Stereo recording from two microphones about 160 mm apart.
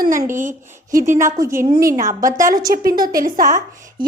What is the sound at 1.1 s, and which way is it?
Speech, 15° right (ahead or behind).